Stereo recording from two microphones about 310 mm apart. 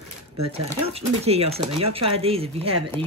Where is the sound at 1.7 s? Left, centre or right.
Right.